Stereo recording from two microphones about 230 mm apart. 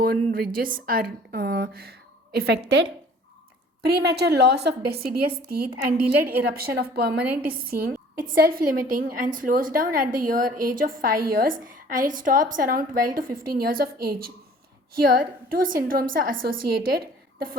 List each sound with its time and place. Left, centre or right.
0.0 s a woman's voice: right